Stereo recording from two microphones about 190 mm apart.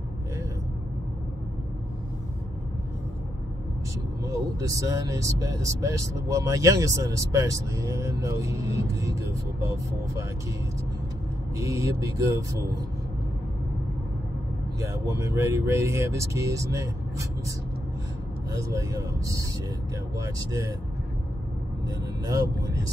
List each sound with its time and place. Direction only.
4.2 s speech: 15° right (ahead or behind)
11.5 s speech: 15° right (ahead or behind)
14.8 s speech: 15° right (ahead or behind)
18.5 s speech: 15° right (ahead or behind)